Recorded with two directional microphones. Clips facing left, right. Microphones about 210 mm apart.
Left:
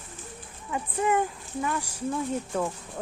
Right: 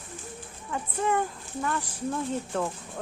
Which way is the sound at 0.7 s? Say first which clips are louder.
Left 2 dB; 15° left (ahead or behind).